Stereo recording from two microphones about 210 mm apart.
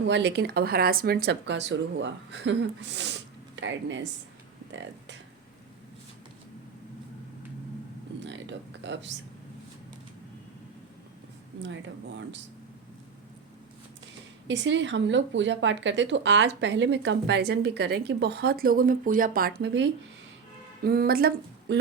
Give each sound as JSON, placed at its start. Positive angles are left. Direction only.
{"t": 0.0, "sound": "a woman's voice", "side_deg": -55}
{"t": 8.2, "sound": "a sound", "side_deg": -60}
{"t": 11.6, "sound": "speech", "side_deg": -60}
{"t": 14.4, "sound": "speech", "side_deg": -60}
{"t": 20.8, "sound": "a woman's voice", "side_deg": -45}